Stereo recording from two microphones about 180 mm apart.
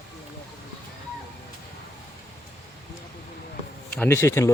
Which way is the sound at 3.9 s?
10° left (ahead or behind).